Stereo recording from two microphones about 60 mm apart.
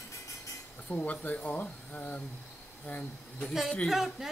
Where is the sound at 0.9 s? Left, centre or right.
Left.